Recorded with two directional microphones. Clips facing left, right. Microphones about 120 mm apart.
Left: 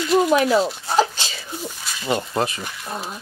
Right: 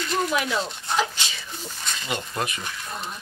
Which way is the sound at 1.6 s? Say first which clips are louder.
Left 3 dB; 5° left (ahead or behind).